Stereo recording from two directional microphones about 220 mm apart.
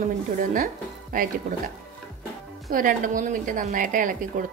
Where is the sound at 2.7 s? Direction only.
40° right (ahead or behind).